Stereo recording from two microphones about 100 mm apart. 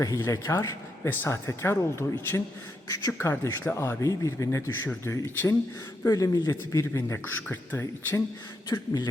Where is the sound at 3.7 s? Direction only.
15° left (ahead or behind).